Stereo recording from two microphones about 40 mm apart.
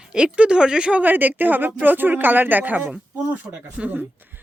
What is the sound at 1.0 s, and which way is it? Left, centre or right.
Speech, right.